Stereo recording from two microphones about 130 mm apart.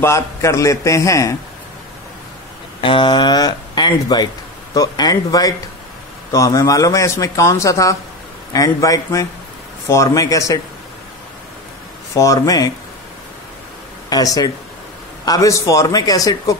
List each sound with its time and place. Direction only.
0.0 s speech: 20° left (ahead or behind)
2.8 s speech: 40° left (ahead or behind)
12.1 s speech: 25° left (ahead or behind)
14.0 s speech: 30° left (ahead or behind)